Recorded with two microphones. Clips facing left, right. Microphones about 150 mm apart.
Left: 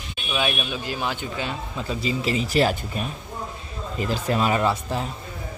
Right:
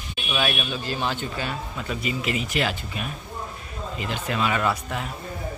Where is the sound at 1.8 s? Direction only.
30° left (ahead or behind).